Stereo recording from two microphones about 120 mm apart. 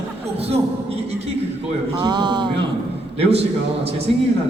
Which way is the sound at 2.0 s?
35° right (ahead or behind).